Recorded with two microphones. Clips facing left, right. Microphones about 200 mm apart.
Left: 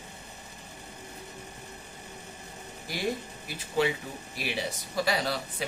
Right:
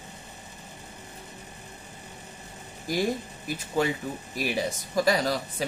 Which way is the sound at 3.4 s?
45° right (ahead or behind).